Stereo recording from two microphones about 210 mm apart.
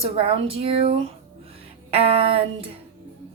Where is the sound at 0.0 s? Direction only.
25° right (ahead or behind).